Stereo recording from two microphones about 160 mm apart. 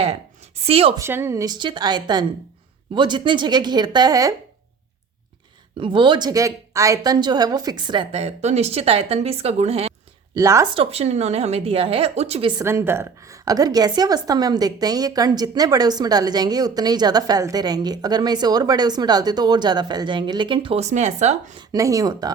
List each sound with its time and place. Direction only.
0.6 s a woman's voice: 35° right (ahead or behind)
0.9 s a woman's voice: 15° right (ahead or behind)
5.8 s a woman's voice: 30° right (ahead or behind)
10.3 s a woman's voice: 20° right (ahead or behind)
10.8 s a woman's voice: 40° right (ahead or behind)
12.6 s a woman's voice: 15° right (ahead or behind); by 21.5 s 45° right (ahead or behind)
21.7 s a woman's voice: 20° right (ahead or behind)